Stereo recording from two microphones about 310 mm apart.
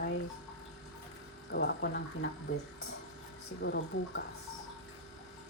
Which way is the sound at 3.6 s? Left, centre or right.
Left.